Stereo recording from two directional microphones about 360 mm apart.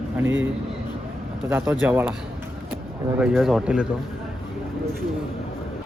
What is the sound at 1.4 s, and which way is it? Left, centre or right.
Speech, centre.